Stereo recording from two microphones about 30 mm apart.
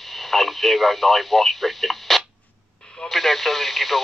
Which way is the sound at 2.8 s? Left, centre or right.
Left.